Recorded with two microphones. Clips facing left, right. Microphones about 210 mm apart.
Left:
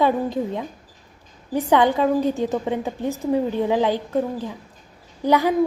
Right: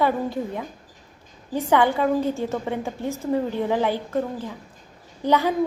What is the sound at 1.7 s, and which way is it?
A woman's voice, 15° left (ahead or behind).